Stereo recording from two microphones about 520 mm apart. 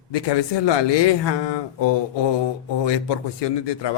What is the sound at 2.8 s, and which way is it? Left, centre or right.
A man's voice, left.